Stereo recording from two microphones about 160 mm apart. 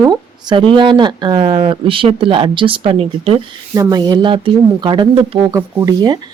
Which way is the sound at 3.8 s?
25° right (ahead or behind).